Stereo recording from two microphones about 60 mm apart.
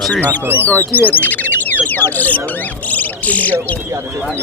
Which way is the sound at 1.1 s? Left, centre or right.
Left.